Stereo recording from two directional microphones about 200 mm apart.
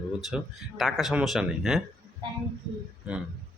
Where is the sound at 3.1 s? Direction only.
5° right (ahead or behind).